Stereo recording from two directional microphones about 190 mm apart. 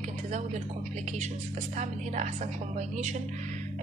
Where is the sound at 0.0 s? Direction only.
40° right (ahead or behind).